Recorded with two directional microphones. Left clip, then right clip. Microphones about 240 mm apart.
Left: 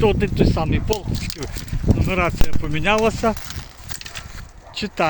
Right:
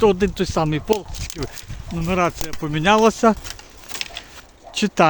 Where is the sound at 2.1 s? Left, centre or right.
Right.